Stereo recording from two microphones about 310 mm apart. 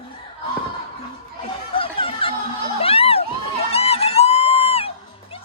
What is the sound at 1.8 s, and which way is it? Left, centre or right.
Music, centre.